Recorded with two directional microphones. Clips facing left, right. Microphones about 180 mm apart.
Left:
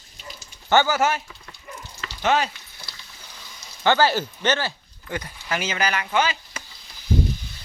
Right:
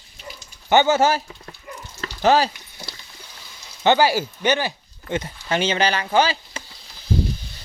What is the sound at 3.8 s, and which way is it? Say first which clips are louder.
Speech: right 2 dB; 15° right (ahead or behind).